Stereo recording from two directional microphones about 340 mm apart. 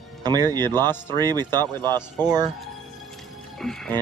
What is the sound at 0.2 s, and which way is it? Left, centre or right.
Speech, centre.